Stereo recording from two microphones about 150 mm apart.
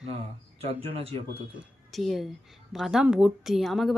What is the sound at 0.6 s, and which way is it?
Speech, 40° right (ahead or behind).